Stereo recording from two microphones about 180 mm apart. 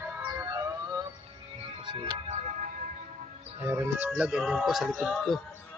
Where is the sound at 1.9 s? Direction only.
30° right (ahead or behind).